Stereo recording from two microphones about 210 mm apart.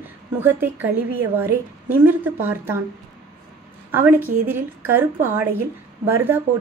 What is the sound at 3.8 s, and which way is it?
A woman's voice, 10° right (ahead or behind).